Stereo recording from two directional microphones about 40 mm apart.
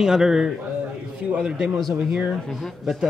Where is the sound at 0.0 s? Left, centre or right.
Centre.